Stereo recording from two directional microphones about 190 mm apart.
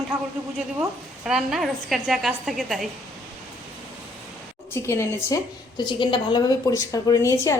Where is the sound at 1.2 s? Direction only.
5° right (ahead or behind).